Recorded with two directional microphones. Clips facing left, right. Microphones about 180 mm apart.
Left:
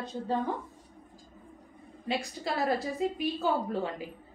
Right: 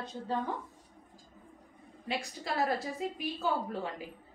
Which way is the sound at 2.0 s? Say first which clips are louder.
Left 4 dB; 30° left (ahead or behind).